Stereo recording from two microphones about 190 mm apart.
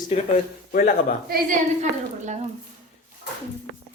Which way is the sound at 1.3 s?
40° right (ahead or behind).